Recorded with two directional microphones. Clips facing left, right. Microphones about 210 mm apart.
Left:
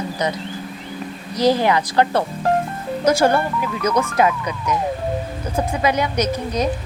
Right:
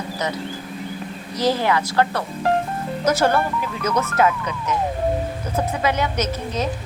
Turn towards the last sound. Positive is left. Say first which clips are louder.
# left 3 dB
turn(degrees=15)  # may be behind; listen again after turning